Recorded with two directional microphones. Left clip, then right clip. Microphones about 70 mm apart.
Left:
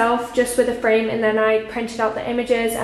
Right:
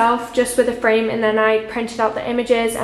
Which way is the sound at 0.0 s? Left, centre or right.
Right.